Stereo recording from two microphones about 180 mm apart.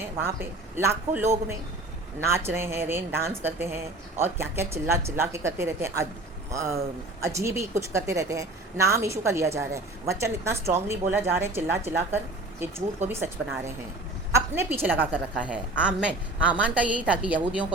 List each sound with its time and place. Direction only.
0.8 s a woman's voice: 15° right (ahead or behind)
14.3 s a woman's voice: 15° right (ahead or behind)